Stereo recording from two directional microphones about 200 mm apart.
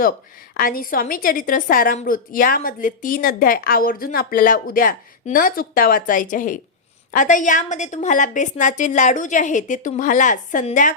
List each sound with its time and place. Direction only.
0.5 s a woman's voice: 45° left (ahead or behind)